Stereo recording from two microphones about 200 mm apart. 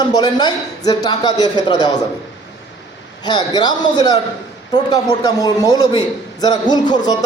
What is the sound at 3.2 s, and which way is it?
Speech, 20° left (ahead or behind).